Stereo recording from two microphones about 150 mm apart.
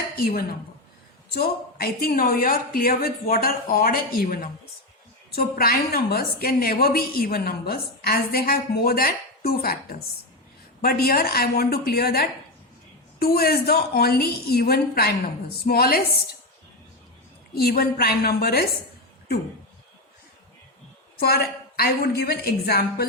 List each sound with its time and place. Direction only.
0.2 s a woman's voice: 90° left; by 4.4 s 70° left (ahead or behind)
5.3 s a woman's voice: 85° left
17.5 s a woman's voice: 90° left
21.2 s a woman's voice: 90° left